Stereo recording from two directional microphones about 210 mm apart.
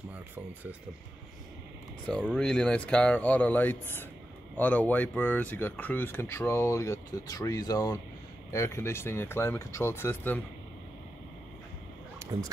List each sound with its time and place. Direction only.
2.0 s speech: 5° left (ahead or behind)
12.3 s speech: 25° right (ahead or behind)